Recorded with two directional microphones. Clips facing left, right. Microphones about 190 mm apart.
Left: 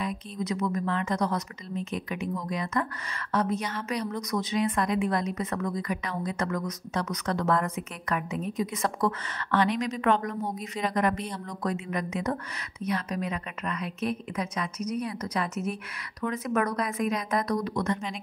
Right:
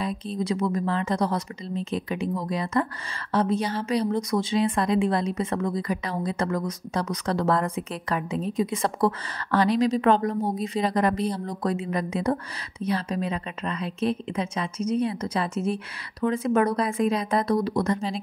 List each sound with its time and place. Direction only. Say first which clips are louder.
0.0 s a woman's voice: right 4 dB; 30° right (ahead or behind)